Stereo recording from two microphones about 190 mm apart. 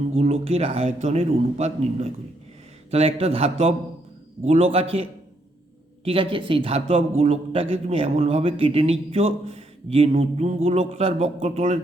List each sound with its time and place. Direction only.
0.1 s a man's voice: 35° right (ahead or behind)
6.1 s a man's voice: 25° right (ahead or behind)